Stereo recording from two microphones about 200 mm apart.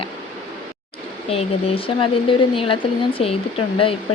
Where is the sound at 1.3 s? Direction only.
30° left (ahead or behind).